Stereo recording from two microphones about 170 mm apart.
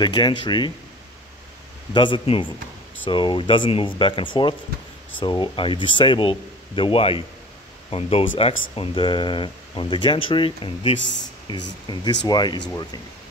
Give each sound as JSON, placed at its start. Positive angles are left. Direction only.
{"t": 0.0, "sound": "speech", "side_deg": 25}
{"t": 2.0, "sound": "speech", "side_deg": 30}
{"t": 11.0, "sound": "speech", "side_deg": 90}
{"t": 11.4, "sound": "speech", "side_deg": 25}